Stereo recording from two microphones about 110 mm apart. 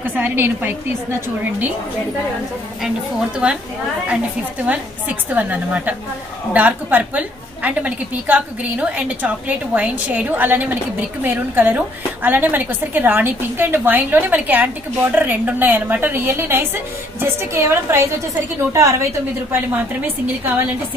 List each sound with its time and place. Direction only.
0.0 s a woman's voice: 20° right (ahead or behind)
4.6 s a woman's voice: 15° right (ahead or behind)
19.5 s a woman's voice: 15° right (ahead or behind)